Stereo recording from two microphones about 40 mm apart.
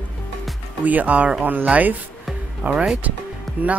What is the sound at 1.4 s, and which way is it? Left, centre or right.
Speech, right.